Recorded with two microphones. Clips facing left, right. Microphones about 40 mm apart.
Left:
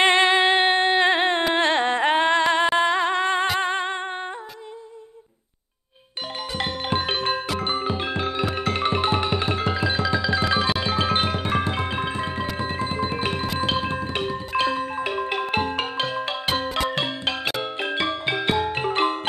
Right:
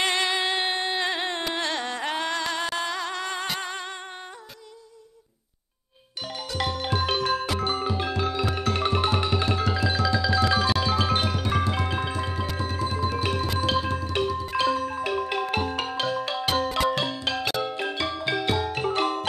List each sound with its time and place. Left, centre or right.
0.0 s music: left
1.5 s a sound: left
3.5 s music: left
6.6 s music: left